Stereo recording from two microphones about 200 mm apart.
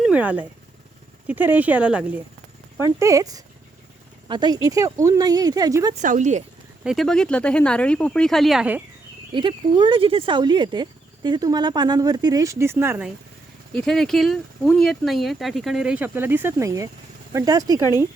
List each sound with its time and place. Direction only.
0.0 s speech: 5° right (ahead or behind)
5.9 s speech: 40° right (ahead or behind)
6.8 s speech: centre (ahead or behind)
9.3 s speech: 25° right (ahead or behind)
13.7 s speech: centre (ahead or behind); by 17.8 s 15° right (ahead or behind)